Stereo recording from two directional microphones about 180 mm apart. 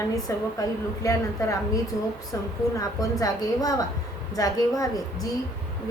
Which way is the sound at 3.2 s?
20° left (ahead or behind).